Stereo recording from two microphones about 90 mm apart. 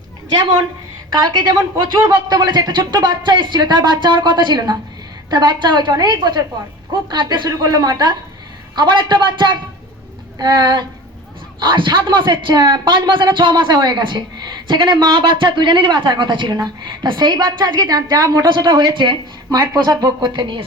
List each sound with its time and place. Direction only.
1.1 s a woman's voice: 55° right (ahead or behind)
18.4 s a woman's voice: 55° right (ahead or behind)
19.5 s speech: 45° right (ahead or behind); by 20.7 s 60° right (ahead or behind)